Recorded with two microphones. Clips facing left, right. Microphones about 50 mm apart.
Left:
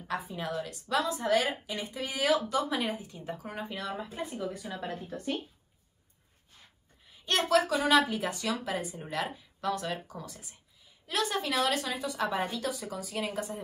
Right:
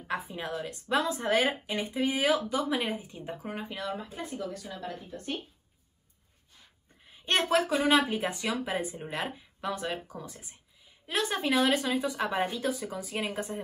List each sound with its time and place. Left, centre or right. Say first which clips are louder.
0.1 s a woman's voice: even; right
3.5 s speech: right 1 dB; centre
4.6 s speech: left 2 dB; left
5.1 s speech: left 3 dB; left
7.1 s a woman's voice: even; right
9.3 s a woman's voice: left 2 dB; centre